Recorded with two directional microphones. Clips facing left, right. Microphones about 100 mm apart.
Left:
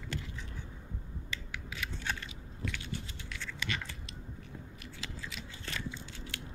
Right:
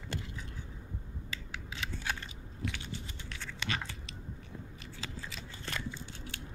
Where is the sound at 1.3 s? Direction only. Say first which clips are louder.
Left 1 dB; 30° right (ahead or behind).